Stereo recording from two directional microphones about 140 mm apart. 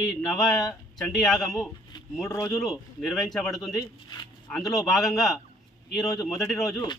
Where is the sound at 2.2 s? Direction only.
25° left (ahead or behind).